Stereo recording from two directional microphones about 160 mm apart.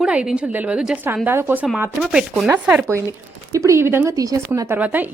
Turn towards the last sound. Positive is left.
turn(degrees=-10)  # may be behind; listen again after turning